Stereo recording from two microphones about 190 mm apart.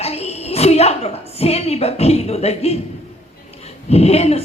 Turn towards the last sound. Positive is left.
turn(degrees=35)  # may be behind; listen again after turning